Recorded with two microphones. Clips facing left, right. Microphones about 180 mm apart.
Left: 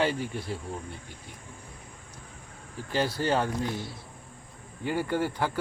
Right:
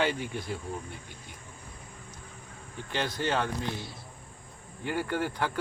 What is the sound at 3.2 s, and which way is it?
Speech, 40° left (ahead or behind).